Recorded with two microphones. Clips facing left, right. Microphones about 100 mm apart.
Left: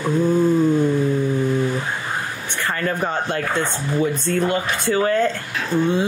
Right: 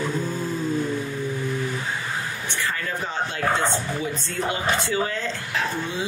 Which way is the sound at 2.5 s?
50° left (ahead or behind).